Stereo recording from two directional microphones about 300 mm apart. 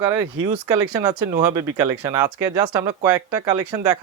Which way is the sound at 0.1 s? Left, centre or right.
Centre.